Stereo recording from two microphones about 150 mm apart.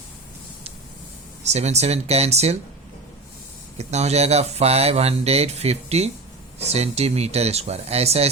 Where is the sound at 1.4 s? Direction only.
45° right (ahead or behind).